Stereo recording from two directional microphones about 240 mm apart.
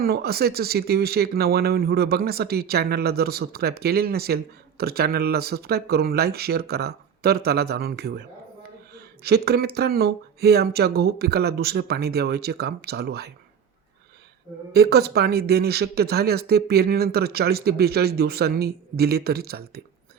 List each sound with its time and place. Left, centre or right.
0.0 s speech: right
9.2 s speech: right
14.7 s speech: right